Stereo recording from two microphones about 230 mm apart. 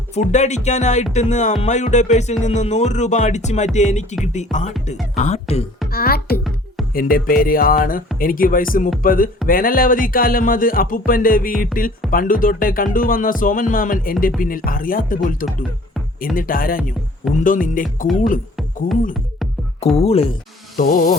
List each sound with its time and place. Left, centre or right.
0.1 s speech: left
5.9 s speech: left
20.0 s speech: left